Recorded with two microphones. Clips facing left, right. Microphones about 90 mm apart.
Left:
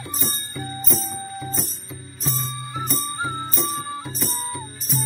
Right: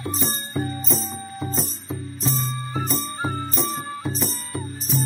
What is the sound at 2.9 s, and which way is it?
Music, 45° right (ahead or behind).